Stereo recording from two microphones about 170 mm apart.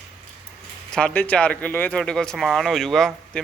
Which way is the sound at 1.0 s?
5° left (ahead or behind).